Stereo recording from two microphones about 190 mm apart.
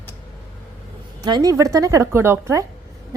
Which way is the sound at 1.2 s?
20° right (ahead or behind).